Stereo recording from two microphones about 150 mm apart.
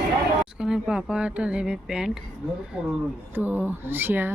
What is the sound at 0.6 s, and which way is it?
Speech, 5° right (ahead or behind).